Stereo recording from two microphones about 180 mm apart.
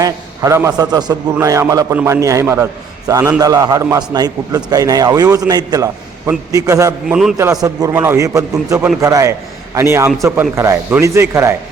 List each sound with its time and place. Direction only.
0.0 s a man's voice: 15° right (ahead or behind)
7.1 s a man's voice: centre (ahead or behind)
7.6 s a man's voice: 20° right (ahead or behind)